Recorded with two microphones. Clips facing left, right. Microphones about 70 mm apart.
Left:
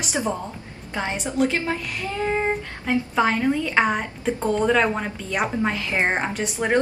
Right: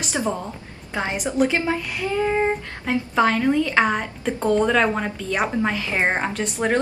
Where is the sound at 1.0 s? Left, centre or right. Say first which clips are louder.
Right 2 dB; centre.